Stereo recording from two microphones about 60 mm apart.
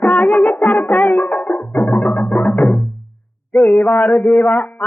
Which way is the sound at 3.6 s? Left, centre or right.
Left.